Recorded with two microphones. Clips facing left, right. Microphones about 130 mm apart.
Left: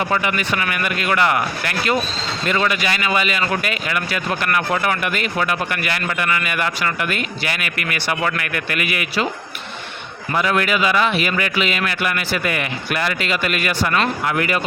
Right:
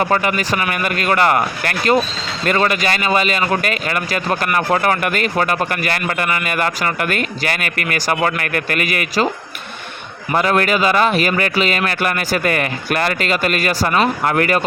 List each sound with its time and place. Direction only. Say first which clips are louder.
0.0 s a man's voice: right 3 dB; 45° right (ahead or behind)
10.3 s a man's voice: right 3 dB; 40° right (ahead or behind)